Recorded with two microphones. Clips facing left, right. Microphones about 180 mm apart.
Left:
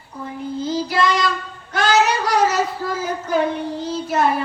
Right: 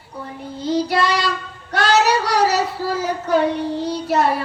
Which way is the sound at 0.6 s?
65° right (ahead or behind).